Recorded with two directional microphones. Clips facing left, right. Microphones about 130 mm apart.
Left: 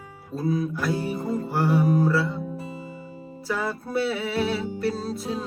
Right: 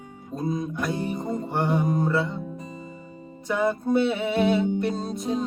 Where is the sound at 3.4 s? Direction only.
20° right (ahead or behind).